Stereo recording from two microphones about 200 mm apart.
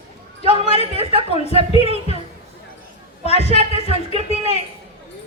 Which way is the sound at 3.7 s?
30° right (ahead or behind).